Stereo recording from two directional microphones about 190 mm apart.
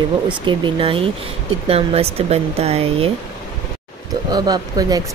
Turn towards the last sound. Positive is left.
turn(degrees=-20)  # may be behind; listen again after turning